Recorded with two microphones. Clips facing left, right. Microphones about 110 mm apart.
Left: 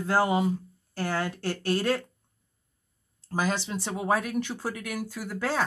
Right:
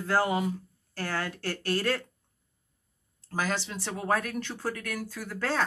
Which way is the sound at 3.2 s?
15° left (ahead or behind).